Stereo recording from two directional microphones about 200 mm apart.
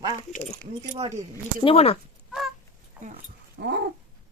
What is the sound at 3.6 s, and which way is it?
Babbling, 55° right (ahead or behind).